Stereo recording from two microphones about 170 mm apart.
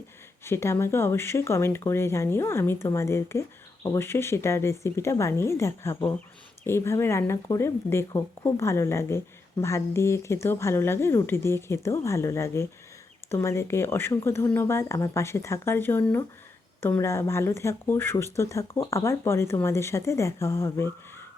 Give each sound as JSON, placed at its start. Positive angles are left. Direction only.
{"t": 0.4, "sound": "speech", "side_deg": 15}